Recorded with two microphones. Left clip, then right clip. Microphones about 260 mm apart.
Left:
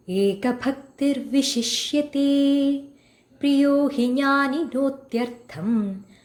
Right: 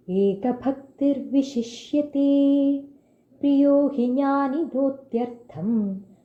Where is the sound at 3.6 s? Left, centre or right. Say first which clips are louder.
Right 3 dB; left.